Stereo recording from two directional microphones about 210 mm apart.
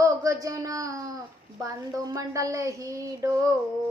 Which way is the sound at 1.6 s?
15° right (ahead or behind).